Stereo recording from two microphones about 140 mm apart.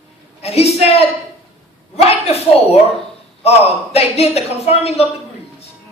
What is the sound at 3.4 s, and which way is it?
A woman's voice, 45° left (ahead or behind).